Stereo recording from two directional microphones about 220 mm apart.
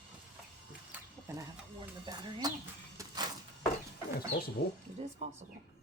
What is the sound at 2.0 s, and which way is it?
Speech, 20° right (ahead or behind).